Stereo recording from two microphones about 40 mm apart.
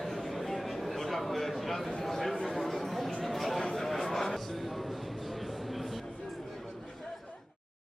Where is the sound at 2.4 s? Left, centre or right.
Centre.